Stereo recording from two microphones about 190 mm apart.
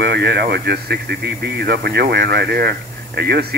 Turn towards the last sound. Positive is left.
turn(degrees=-60)  # may be behind; listen again after turning